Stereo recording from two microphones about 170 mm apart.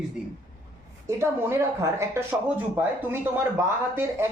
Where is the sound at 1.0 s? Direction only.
15° right (ahead or behind).